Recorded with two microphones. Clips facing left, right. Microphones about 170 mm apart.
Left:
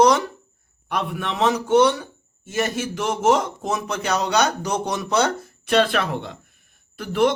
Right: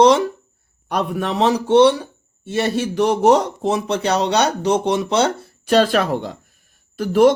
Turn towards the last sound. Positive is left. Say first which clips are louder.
# right 6 dB
turn(degrees=-40)  # may be behind; listen again after turning